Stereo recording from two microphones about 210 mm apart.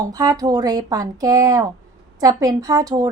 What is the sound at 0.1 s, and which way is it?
A woman's voice, 15° right (ahead or behind).